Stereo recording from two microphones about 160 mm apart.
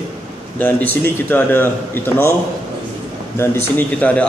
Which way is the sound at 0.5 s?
10° left (ahead or behind).